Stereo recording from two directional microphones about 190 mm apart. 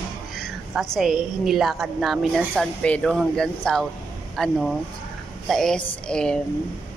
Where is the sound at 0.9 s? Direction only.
Centre (ahead or behind).